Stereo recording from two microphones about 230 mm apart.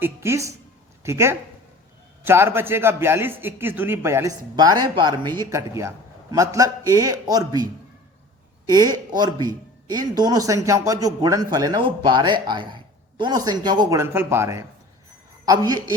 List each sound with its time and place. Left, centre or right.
0.0 s speech: centre